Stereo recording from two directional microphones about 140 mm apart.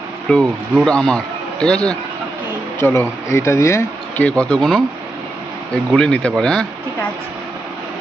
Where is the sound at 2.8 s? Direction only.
15° left (ahead or behind).